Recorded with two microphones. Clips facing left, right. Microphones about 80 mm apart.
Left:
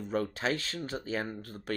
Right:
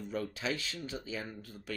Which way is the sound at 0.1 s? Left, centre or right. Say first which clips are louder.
Left 5 dB; left.